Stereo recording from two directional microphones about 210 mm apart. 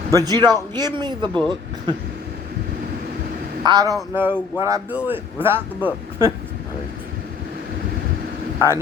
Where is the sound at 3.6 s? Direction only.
15° right (ahead or behind).